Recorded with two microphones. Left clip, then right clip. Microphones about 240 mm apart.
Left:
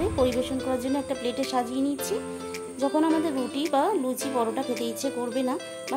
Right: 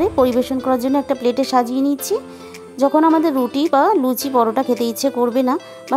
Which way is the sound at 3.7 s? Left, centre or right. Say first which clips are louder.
Right 9 dB; right.